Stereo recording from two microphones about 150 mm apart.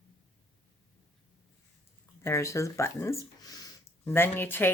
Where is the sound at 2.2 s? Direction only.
20° left (ahead or behind).